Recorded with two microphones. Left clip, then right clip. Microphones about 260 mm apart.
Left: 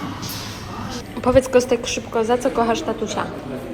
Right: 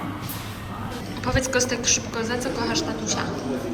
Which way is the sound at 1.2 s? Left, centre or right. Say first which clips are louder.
Left 8 dB; centre.